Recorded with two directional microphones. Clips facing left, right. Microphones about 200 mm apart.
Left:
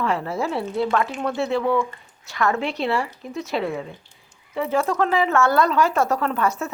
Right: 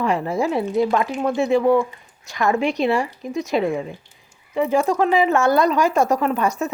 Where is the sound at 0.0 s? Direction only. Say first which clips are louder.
Right 3 dB; 15° right (ahead or behind).